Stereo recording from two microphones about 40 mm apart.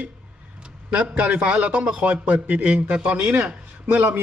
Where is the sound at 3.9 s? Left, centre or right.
Right.